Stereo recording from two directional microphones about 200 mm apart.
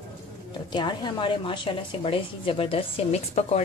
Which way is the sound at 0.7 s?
20° left (ahead or behind).